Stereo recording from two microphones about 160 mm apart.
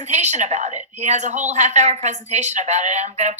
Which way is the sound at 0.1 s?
45° right (ahead or behind).